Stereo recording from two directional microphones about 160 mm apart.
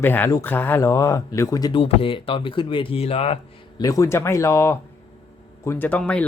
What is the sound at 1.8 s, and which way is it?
Speech, 35° left (ahead or behind).